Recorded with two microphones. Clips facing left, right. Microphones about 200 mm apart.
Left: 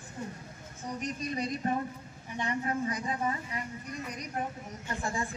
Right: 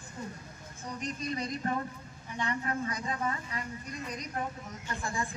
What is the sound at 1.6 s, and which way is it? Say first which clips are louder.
Speech: left 2 dB; 20° left (ahead or behind).